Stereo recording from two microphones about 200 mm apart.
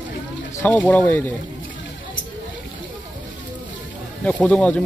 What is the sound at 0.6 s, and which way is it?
Speech, 10° left (ahead or behind).